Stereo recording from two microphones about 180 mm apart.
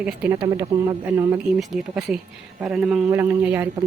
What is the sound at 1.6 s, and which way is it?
A woman's voice, centre (ahead or behind).